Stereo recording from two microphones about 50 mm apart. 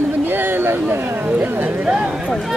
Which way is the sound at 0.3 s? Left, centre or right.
Right.